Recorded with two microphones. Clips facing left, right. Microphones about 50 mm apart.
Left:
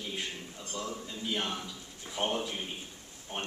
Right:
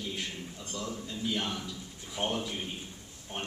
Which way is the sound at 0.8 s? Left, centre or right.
Centre.